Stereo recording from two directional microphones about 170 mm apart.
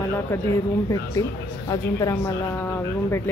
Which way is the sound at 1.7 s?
20° left (ahead or behind).